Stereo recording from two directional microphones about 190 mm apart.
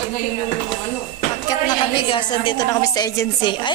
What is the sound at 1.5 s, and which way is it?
A woman's voice, 25° left (ahead or behind).